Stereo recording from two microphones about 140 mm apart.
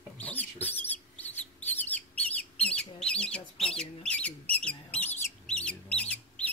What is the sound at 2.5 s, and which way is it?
Chicken, 5° left (ahead or behind).